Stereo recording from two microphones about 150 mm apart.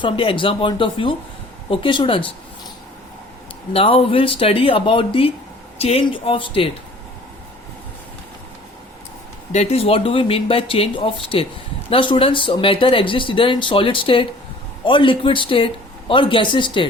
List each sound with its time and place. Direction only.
0.0 s speech: 35° left (ahead or behind)
3.7 s speech: 40° left (ahead or behind)
9.5 s speech: 45° left (ahead or behind)